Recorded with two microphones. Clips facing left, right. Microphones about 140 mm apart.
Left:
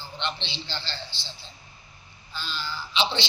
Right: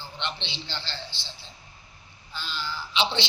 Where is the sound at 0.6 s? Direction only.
15° right (ahead or behind).